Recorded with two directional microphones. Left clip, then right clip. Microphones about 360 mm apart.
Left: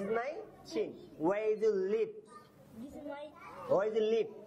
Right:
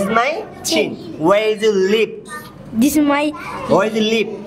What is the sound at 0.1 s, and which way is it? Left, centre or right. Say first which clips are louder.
A woman's voice: right 18 dB; centre.